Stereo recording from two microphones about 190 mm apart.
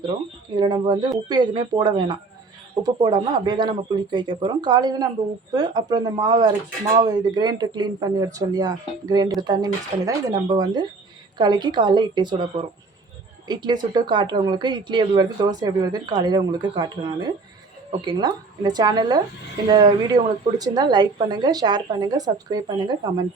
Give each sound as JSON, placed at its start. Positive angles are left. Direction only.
{"t": 0.5, "sound": "speech", "side_deg": -25}